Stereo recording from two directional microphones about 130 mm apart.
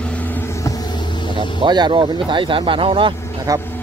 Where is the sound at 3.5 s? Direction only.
25° right (ahead or behind).